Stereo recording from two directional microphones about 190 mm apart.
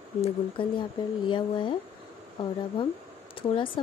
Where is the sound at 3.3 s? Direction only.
25° left (ahead or behind).